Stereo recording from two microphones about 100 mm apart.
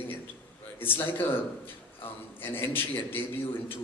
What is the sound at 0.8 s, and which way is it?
Speech, 20° left (ahead or behind).